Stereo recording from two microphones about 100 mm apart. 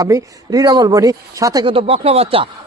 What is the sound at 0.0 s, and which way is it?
Speech, 35° right (ahead or behind).